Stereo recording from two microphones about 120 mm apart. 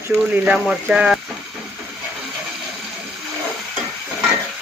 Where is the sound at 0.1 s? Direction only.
10° right (ahead or behind).